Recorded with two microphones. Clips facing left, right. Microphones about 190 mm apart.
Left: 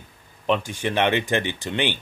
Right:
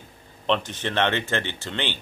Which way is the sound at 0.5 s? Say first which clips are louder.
Left 2 dB; 10° left (ahead or behind).